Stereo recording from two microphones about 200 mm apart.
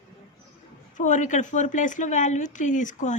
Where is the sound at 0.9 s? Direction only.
40° left (ahead or behind).